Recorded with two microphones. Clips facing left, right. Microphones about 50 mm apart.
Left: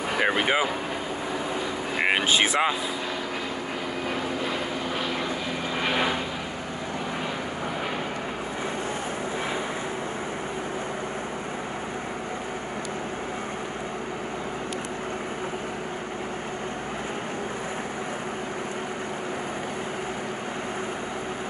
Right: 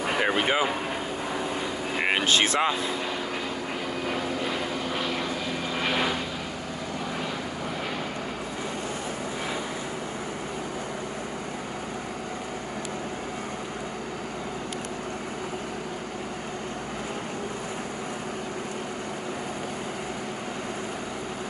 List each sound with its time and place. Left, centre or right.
0.2 s vehicle: centre
2.0 s vehicle: centre
5.8 s vehicle: centre